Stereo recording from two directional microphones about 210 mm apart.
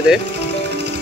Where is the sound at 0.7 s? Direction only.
55° right (ahead or behind).